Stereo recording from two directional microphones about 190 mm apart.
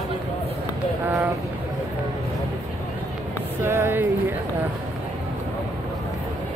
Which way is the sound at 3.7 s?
10° right (ahead or behind).